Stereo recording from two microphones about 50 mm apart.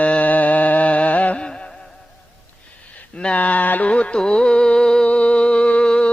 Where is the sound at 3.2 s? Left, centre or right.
Left.